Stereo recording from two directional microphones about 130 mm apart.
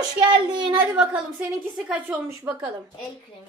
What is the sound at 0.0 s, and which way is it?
Speech, 35° right (ahead or behind).